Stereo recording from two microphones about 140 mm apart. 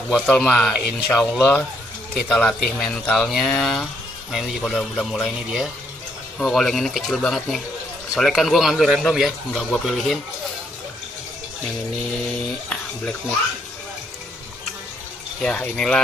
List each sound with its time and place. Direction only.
0.3 s a man's voice: 10° left (ahead or behind)
15.4 s speech: 5° left (ahead or behind)